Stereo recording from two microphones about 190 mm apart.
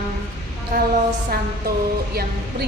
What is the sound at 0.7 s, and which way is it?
Speech, 50° right (ahead or behind).